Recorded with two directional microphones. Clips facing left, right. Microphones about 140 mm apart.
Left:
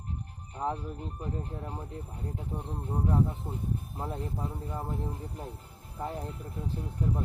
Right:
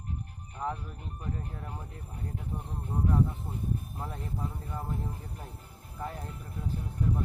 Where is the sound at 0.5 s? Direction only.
30° left (ahead or behind).